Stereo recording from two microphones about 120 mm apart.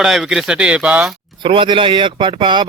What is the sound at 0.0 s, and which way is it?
Speech, 5° right (ahead or behind).